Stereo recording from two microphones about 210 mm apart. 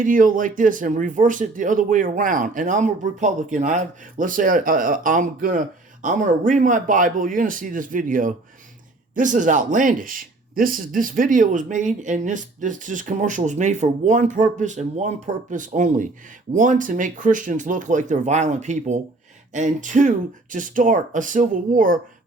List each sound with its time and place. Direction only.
0.0 s speech: 40° right (ahead or behind)